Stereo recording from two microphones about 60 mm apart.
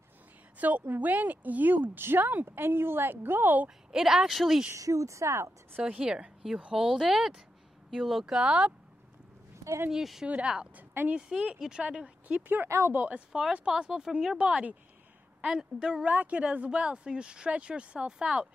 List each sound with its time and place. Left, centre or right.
0.6 s a woman's voice: right
3.6 s speech: centre
4.7 s speech: right
5.8 s speech: right; by 8.4 s centre
8.4 s speech: centre
9.8 s speech: centre
10.2 s speech: right
11.1 s speech: centre
12.6 s speech: right
12.9 s speech: right
13.3 s speech: centre
14.4 s speech: centre
16.1 s speech: right